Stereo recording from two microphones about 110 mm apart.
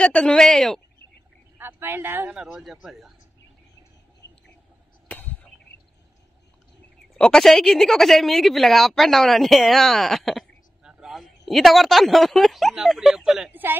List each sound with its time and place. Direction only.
0.0 s speech: 10° left (ahead or behind)
1.6 s speech: 20° right (ahead or behind)
2.2 s a woman's voice: 5° right (ahead or behind)
5.1 s a sound: 15° left (ahead or behind)
7.2 s a woman's voice: 5° left (ahead or behind)
13.5 s speech: 20° right (ahead or behind)